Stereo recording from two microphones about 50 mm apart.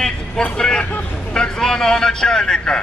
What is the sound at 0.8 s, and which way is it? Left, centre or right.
Speech, left.